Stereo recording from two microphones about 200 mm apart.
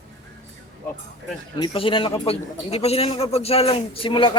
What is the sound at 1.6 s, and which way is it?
A man's voice, 25° left (ahead or behind).